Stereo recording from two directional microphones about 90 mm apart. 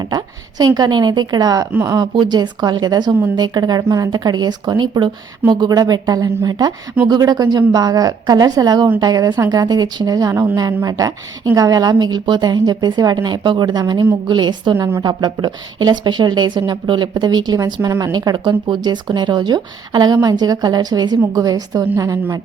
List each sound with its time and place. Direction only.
0.0 s a woman's voice: 50° right (ahead or behind)
4.1 s a woman's voice: 50° right (ahead or behind)
5.5 s a woman's voice: 45° right (ahead or behind)